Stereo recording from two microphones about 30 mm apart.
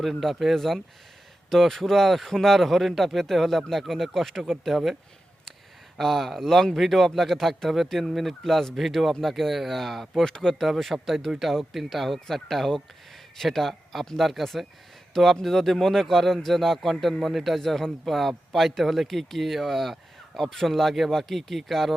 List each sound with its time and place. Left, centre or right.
0.0 s a man's voice: centre
6.0 s a man's voice: centre
10.2 s speech: left
10.6 s a man's voice: centre
14.2 s speech: centre
15.1 s a man's voice: centre
17.7 s a man's voice: centre
18.1 s a man's voice: centre